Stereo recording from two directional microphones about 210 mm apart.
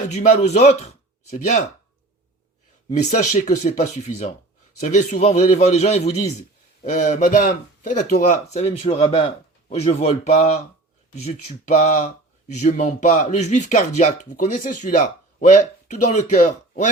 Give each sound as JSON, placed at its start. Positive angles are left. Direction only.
{"t": 0.1, "sound": "speech", "side_deg": 35}
{"t": 2.9, "sound": "speech", "side_deg": 35}
{"t": 11.8, "sound": "speech", "side_deg": 35}